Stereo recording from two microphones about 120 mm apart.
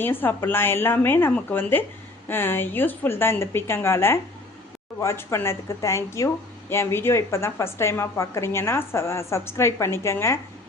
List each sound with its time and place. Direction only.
0.0 s speech: 15° left (ahead or behind)